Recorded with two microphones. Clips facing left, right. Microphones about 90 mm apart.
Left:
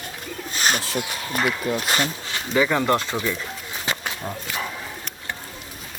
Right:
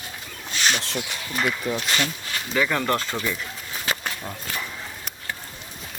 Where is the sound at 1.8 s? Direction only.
45° left (ahead or behind).